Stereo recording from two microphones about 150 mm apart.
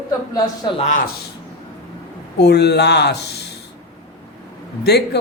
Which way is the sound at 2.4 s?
90° left.